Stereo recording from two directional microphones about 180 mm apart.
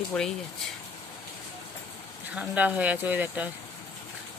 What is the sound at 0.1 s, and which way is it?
Speech, 5° left (ahead or behind).